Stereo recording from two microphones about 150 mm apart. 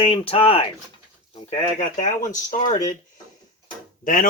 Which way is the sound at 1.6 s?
55° left (ahead or behind).